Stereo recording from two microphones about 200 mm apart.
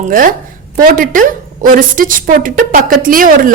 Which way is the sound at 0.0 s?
45° right (ahead or behind).